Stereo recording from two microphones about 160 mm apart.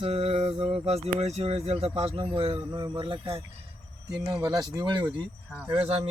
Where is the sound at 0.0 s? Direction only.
40° right (ahead or behind).